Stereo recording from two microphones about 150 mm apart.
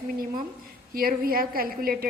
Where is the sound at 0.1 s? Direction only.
65° right (ahead or behind).